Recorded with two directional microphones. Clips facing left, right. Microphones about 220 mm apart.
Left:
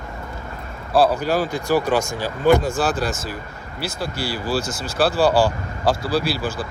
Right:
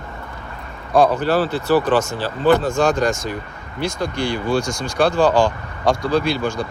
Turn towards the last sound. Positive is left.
turn(degrees=5)  # may be behind; listen again after turning